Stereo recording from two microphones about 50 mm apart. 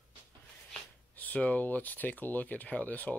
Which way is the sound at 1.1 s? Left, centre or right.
Left.